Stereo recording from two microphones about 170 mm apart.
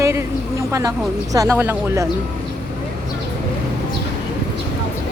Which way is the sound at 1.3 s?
15° right (ahead or behind).